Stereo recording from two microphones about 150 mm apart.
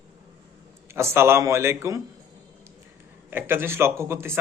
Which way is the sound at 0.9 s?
15° right (ahead or behind).